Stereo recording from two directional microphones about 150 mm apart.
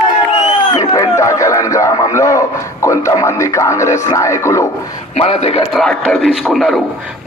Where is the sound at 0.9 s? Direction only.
20° left (ahead or behind).